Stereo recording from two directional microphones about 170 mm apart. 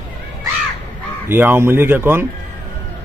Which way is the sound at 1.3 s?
15° right (ahead or behind).